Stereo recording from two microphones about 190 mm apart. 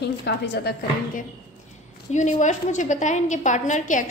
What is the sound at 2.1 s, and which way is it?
A woman's voice, 40° left (ahead or behind).